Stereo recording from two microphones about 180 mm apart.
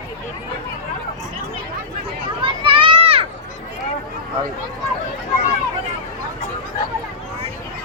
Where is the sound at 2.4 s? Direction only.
30° right (ahead or behind).